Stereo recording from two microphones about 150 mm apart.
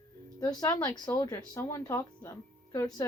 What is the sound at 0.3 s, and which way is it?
Speech, 25° left (ahead or behind).